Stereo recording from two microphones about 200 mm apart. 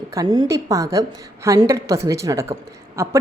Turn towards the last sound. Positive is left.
turn(degrees=-15)  # may be behind; listen again after turning